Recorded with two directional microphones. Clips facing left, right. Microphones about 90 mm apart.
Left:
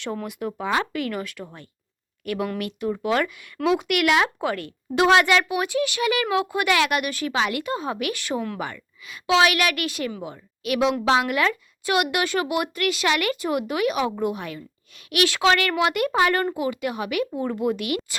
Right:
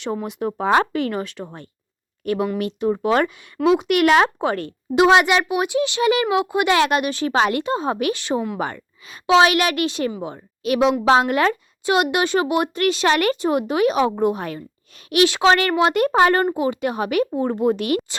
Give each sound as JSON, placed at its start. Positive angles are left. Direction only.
{"t": 0.0, "sound": "a child's voice", "side_deg": -20}
{"t": 4.9, "sound": "a child's voice", "side_deg": -20}
{"t": 8.5, "sound": "a child's voice", "side_deg": -35}
{"t": 15.2, "sound": "a child's voice", "side_deg": -25}